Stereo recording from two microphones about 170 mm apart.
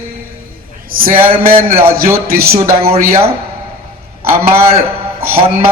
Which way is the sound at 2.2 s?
65° right (ahead or behind).